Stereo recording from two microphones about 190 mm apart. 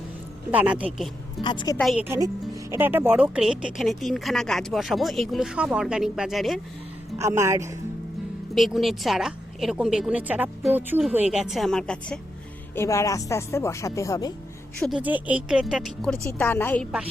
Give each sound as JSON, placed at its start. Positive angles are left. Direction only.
{"t": 0.5, "sound": "speech", "side_deg": -5}
{"t": 1.4, "sound": "a woman's voice", "side_deg": 25}
{"t": 1.8, "sound": "speech", "side_deg": 0}
{"t": 2.0, "sound": "speech", "side_deg": -15}
{"t": 7.2, "sound": "speech", "side_deg": -15}
{"t": 8.5, "sound": "speech", "side_deg": 0}
{"t": 12.7, "sound": "speech", "side_deg": 15}
{"t": 14.8, "sound": "speech", "side_deg": -5}